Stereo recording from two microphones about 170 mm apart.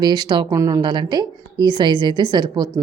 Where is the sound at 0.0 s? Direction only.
25° right (ahead or behind).